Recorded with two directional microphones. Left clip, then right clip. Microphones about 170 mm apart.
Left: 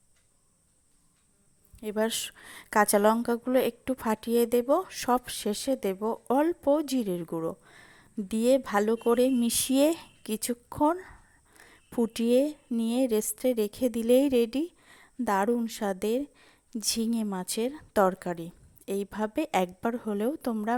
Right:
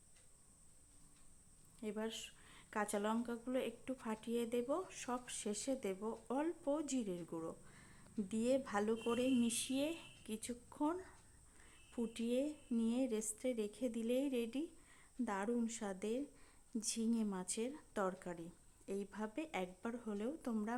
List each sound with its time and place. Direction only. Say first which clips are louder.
1.8 s a woman's voice: left 16 dB; 50° left (ahead or behind)